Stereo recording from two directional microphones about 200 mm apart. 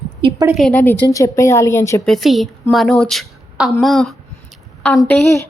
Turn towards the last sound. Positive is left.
turn(degrees=15)  # may be behind; listen again after turning